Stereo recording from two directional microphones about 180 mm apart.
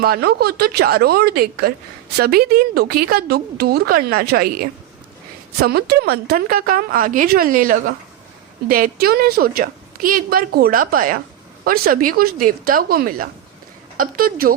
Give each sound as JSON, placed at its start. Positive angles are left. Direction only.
{"t": 0.0, "sound": "a woman's voice", "side_deg": -60}
{"t": 5.6, "sound": "a woman's voice", "side_deg": -60}